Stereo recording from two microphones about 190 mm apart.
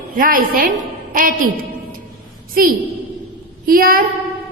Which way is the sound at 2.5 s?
45° right (ahead or behind).